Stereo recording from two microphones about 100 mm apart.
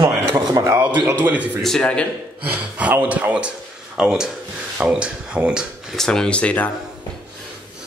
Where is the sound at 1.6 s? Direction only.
5° left (ahead or behind).